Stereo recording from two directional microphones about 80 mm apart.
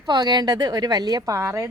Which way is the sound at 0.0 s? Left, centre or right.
Right.